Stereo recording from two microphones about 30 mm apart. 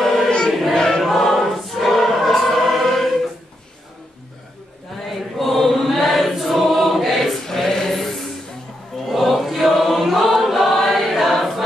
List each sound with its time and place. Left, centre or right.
0.5 s a sound: centre
0.7 s choir: left
1.0 s choir: centre
5.0 s chant: centre
5.9 s choir: centre
7.4 s music: centre
9.1 s choir: centre